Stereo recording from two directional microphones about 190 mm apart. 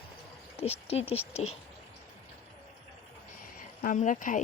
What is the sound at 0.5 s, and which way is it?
Speech, 30° left (ahead or behind).